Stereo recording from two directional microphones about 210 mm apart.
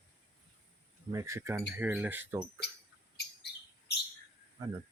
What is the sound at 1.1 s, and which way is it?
Speech, 15° right (ahead or behind).